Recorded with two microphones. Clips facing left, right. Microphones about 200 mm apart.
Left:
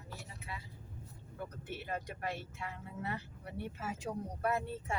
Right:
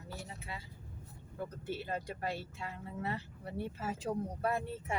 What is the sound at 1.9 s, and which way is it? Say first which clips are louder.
Speech: left 1 dB; 30° right (ahead or behind).